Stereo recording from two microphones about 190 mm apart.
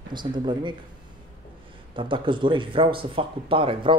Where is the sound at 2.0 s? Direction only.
25° right (ahead or behind).